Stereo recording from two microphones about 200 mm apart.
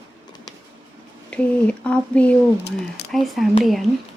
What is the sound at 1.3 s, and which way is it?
Speech, 5° left (ahead or behind).